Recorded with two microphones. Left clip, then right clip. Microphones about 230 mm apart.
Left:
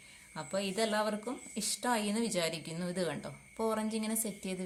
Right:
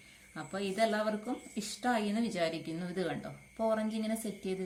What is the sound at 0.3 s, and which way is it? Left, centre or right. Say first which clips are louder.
A woman's voice: right 1 dB; left.